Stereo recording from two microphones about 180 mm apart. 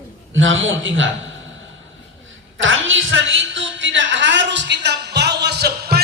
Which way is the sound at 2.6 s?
90° right.